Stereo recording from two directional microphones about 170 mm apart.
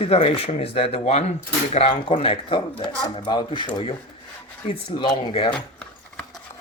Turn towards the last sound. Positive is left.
turn(degrees=5)  # may be behind; listen again after turning